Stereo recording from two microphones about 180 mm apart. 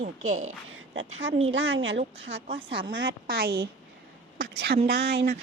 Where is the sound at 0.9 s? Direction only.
90° right.